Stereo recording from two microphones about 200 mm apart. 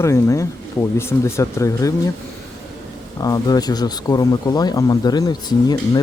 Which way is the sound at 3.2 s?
20° left (ahead or behind).